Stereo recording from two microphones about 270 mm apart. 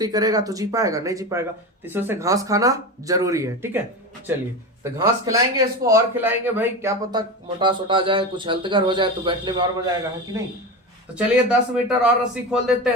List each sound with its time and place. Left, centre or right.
0.0 s a man's voice: centre
11.1 s a man's voice: centre